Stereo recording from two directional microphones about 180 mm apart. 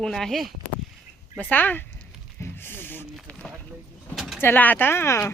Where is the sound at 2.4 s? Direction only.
10° left (ahead or behind).